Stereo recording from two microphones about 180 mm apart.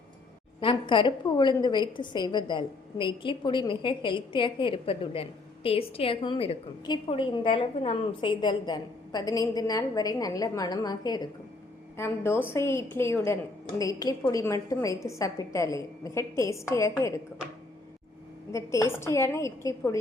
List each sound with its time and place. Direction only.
0.6 s a woman's voice: 30° left (ahead or behind)
18.5 s a woman's voice: 15° left (ahead or behind)